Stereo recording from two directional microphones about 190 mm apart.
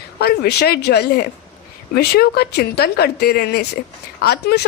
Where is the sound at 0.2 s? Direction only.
55° left (ahead or behind).